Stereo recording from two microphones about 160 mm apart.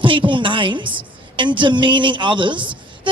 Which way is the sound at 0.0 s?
30° right (ahead or behind).